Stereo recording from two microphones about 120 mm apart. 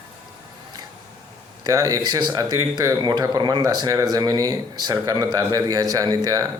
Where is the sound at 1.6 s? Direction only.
30° right (ahead or behind).